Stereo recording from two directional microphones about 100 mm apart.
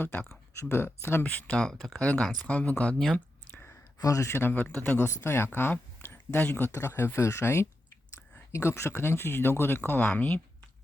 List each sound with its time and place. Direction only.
0.0 s speech: 15° left (ahead or behind)
0.5 s speech: 25° left (ahead or behind)
3.5 s a sound: 20° left (ahead or behind)
4.0 s speech: 30° left (ahead or behind); by 10.4 s 15° left (ahead or behind)